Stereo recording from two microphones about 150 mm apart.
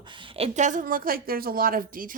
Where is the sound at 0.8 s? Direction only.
75° right (ahead or behind).